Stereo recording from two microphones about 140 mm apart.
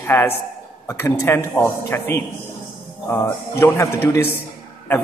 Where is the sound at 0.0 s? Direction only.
15° left (ahead or behind).